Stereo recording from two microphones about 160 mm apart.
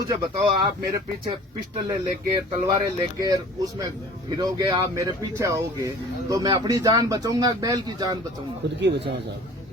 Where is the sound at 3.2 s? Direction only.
25° right (ahead or behind).